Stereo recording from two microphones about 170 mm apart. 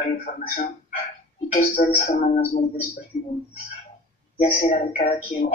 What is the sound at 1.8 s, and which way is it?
Speech, 50° left (ahead or behind).